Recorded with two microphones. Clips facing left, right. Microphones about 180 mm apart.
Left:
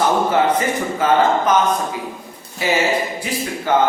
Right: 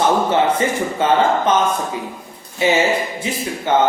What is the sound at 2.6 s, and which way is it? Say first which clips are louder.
Speech: right 2 dB; 25° right (ahead or behind).